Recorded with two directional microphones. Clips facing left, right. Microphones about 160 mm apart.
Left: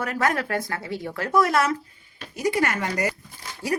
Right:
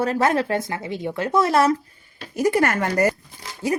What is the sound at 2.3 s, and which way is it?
Speech, 50° right (ahead or behind).